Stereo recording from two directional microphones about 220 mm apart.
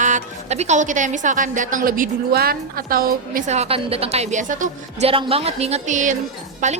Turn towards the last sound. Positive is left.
turn(degrees=-35)  # may be behind; listen again after turning